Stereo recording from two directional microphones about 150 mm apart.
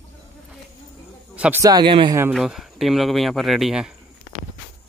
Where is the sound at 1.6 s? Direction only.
30° right (ahead or behind).